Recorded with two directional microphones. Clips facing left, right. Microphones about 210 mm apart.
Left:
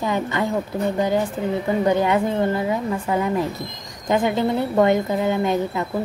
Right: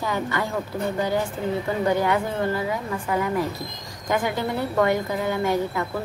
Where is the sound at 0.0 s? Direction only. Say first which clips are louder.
Left 4 dB; 20° left (ahead or behind).